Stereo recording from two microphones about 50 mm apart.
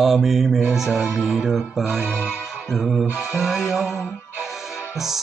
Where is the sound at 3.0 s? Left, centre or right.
Centre.